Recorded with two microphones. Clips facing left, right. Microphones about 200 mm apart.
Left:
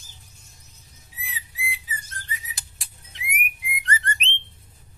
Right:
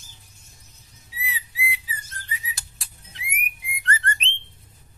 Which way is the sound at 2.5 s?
20° left (ahead or behind).